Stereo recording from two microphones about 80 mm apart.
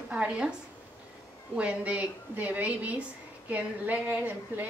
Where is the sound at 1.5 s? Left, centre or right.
Centre.